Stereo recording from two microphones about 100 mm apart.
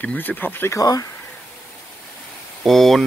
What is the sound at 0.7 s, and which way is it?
Speech, 35° left (ahead or behind).